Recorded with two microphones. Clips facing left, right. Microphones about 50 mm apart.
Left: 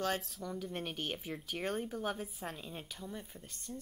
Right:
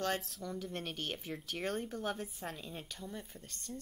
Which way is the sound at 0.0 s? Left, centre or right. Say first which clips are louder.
Even; centre.